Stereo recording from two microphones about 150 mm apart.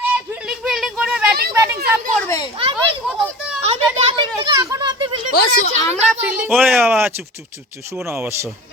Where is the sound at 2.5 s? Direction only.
35° right (ahead or behind).